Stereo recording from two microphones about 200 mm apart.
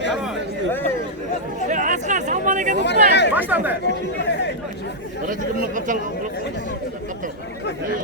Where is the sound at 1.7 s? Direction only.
40° right (ahead or behind).